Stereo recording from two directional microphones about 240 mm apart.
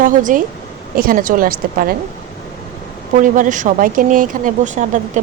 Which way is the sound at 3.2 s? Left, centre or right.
Right.